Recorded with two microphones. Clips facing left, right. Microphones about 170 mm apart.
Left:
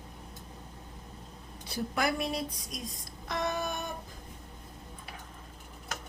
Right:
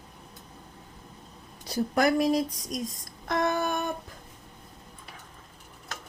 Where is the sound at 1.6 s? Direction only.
40° right (ahead or behind).